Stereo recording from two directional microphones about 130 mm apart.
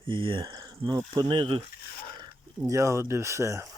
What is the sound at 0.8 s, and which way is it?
Speech, 30° right (ahead or behind).